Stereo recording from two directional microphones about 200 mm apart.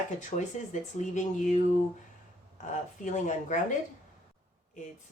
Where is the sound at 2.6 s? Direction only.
40° left (ahead or behind).